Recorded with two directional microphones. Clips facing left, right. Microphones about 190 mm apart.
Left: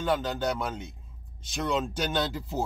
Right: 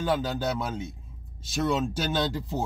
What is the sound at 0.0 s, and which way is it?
Speech, 5° right (ahead or behind).